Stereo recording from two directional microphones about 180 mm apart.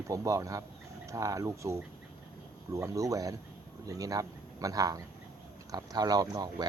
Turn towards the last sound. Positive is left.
turn(degrees=-20)  # may be behind; listen again after turning